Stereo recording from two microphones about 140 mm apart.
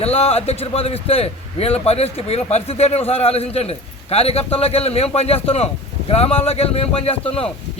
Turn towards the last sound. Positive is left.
turn(degrees=45)  # may be behind; listen again after turning